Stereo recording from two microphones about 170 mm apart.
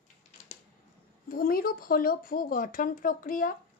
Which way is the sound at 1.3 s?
60° left (ahead or behind).